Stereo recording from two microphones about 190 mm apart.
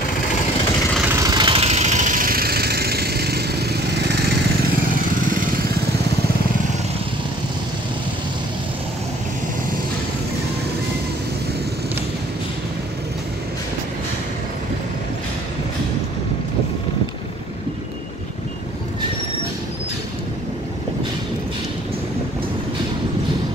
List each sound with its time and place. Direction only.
1.0 s vehicle: 15° right (ahead or behind); by 4.3 s 60° right (ahead or behind)